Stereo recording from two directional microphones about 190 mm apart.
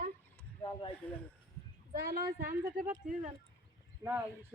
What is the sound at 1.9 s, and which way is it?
Speech, 50° right (ahead or behind).